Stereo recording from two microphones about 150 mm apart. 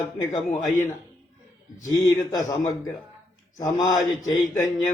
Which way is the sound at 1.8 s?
25° left (ahead or behind).